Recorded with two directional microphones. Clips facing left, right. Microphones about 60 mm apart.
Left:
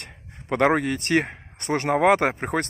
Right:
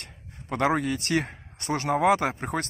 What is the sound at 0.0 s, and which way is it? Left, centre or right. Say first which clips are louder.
Speech: left 3 dB; left.